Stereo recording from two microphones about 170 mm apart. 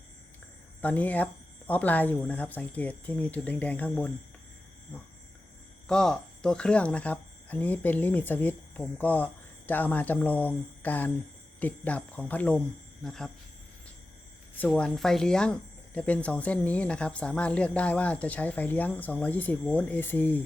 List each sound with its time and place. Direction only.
0.8 s speech: 10° left (ahead or behind)
5.9 s speech: 5° left (ahead or behind)
14.7 s speech: centre (ahead or behind)